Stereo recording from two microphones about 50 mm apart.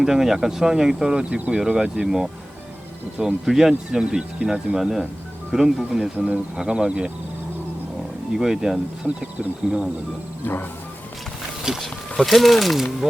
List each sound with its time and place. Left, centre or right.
0.0 s speech: centre
6.1 s speech: right
6.6 s speech: centre
8.4 s speech: centre
9.0 s speech: right
11.8 s speech: centre